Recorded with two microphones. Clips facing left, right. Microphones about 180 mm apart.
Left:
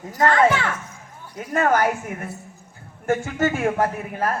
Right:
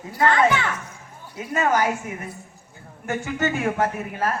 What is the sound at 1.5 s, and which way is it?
Speech, 55° left (ahead or behind).